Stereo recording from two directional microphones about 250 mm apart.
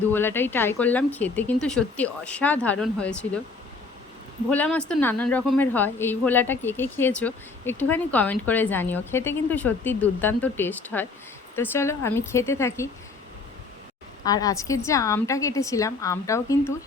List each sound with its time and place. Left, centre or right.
0.1 s speech: centre
4.4 s speech: centre
14.3 s speech: centre